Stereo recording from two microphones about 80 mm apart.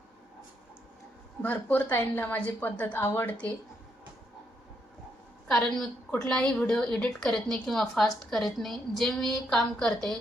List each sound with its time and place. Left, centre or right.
1.4 s a woman's voice: left
5.5 s a woman's voice: centre